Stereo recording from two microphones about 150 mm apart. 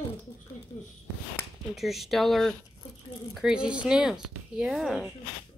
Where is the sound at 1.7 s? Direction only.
Centre (ahead or behind).